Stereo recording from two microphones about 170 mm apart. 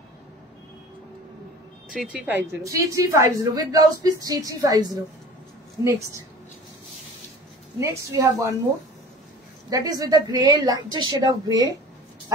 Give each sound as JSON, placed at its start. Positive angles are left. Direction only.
{"t": 1.9, "sound": "speech", "side_deg": -5}
{"t": 2.6, "sound": "a woman's voice", "side_deg": -20}
{"t": 7.8, "sound": "a woman's voice", "side_deg": -15}
{"t": 9.7, "sound": "a woman's voice", "side_deg": -20}